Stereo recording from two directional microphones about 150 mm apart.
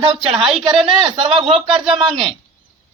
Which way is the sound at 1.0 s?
35° right (ahead or behind).